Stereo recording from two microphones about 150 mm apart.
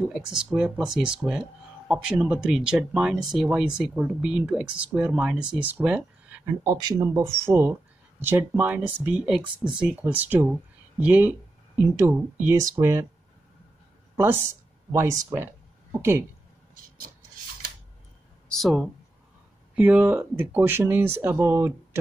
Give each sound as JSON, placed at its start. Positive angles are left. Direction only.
{"t": 0.1, "sound": "speech", "side_deg": -5}
{"t": 6.6, "sound": "speech", "side_deg": -25}
{"t": 14.1, "sound": "speech", "side_deg": -15}
{"t": 18.5, "sound": "speech", "side_deg": 0}
{"t": 19.7, "sound": "speech", "side_deg": -10}